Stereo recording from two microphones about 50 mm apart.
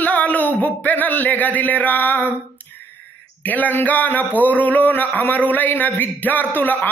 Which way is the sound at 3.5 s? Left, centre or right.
Left.